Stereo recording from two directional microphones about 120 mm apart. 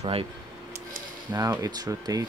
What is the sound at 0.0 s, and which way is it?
Speech, 50° right (ahead or behind).